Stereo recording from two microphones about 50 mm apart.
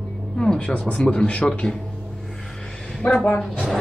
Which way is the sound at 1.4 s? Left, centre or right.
Centre.